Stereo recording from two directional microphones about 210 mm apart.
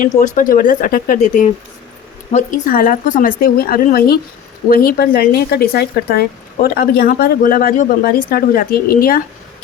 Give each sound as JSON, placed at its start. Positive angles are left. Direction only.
{"t": 0.2, "sound": "a woman's voice", "side_deg": 40}